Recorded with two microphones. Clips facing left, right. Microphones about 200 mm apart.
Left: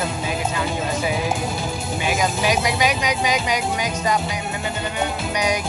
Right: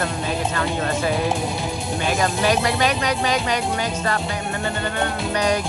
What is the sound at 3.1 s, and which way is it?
Speech, 5° left (ahead or behind).